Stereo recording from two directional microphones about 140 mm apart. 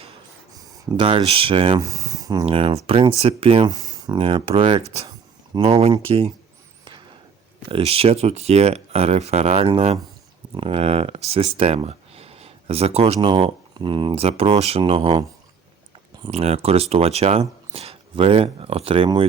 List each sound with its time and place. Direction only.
0.5 s a sound: 25° right (ahead or behind)
1.0 s speech: 40° right (ahead or behind)
1.8 s a sound: 25° right (ahead or behind)
2.5 s speech: 40° right (ahead or behind)
3.8 s speech: 25° right (ahead or behind)
7.7 s speech: 45° right (ahead or behind)
13.1 s speech: 35° right (ahead or behind)
16.3 s speech: 50° right (ahead or behind)